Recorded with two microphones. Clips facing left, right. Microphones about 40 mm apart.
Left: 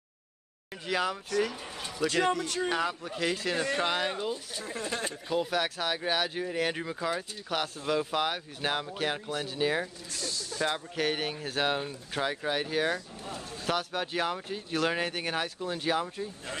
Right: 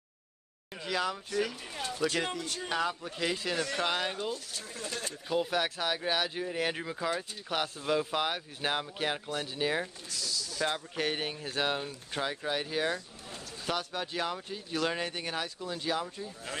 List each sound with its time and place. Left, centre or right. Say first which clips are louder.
0.8 s speech: left 2 dB; centre
2.4 s a man's voice: left 7 dB; left
2.7 s speech: left 2 dB; centre
3.5 s speech: left 3 dB; centre
3.8 s speech: left 2 dB; centre
4.6 s speech: left 5 dB; left
5.3 s speech: even; centre
10.0 s speech: left 1 dB; left
11.0 s speech: left 4 dB; centre; by 16.5 s left